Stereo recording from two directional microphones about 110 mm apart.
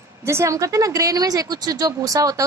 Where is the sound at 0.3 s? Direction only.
25° right (ahead or behind).